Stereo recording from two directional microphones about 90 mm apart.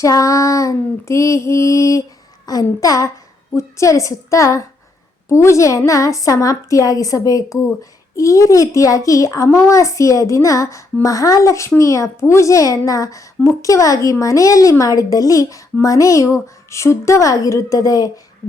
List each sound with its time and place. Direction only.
0.0 s a woman's voice: 35° left (ahead or behind)